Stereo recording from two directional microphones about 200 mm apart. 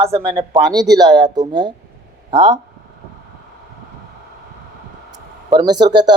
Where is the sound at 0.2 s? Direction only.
25° right (ahead or behind).